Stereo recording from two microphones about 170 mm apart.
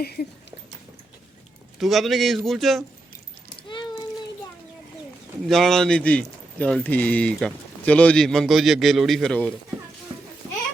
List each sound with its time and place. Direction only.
0.0 s speech: 65° left (ahead or behind)
1.8 s speech: centre (ahead or behind)
5.5 s speech: centre (ahead or behind)